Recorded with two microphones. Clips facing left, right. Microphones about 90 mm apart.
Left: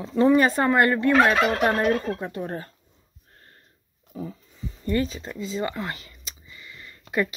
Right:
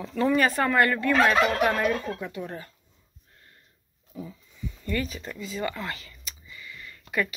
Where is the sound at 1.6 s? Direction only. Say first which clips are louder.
Left 3 dB; 35° left (ahead or behind).